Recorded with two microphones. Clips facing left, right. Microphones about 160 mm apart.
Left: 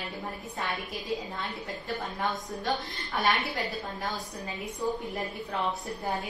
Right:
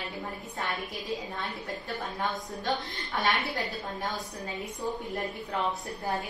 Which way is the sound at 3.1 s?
Centre (ahead or behind).